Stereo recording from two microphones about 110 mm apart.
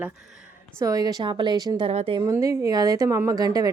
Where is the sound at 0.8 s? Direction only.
35° right (ahead or behind).